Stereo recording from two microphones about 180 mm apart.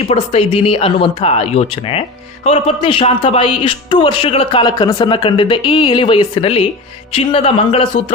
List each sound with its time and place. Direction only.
0.1 s speech: 35° left (ahead or behind)